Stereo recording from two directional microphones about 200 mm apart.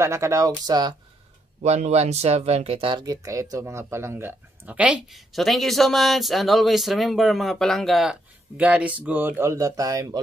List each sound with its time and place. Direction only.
0.0 s speech: 15° right (ahead or behind)
1.6 s speech: 35° right (ahead or behind); by 10.2 s 15° right (ahead or behind)